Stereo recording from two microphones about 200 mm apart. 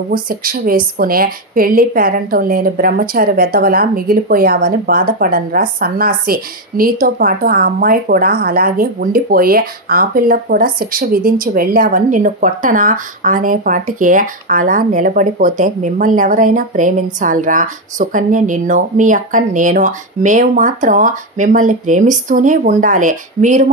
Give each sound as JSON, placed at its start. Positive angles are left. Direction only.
{"t": 0.1, "sound": "a woman's voice", "side_deg": -45}